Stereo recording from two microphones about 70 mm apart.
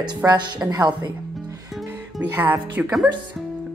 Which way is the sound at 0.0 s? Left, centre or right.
Right.